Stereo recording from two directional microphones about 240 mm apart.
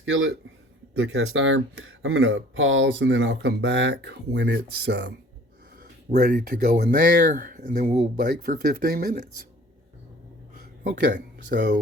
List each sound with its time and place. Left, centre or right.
0.0 s speech: right
6.1 s speech: right
10.6 s a sound: right